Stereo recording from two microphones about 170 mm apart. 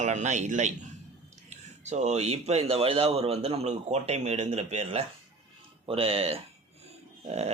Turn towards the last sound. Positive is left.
turn(degrees=-35)  # may be behind; listen again after turning